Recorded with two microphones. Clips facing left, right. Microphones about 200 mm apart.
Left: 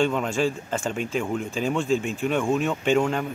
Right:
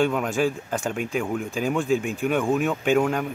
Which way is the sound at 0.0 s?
5° right (ahead or behind).